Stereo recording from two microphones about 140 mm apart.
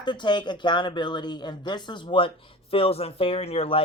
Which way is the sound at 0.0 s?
35° left (ahead or behind).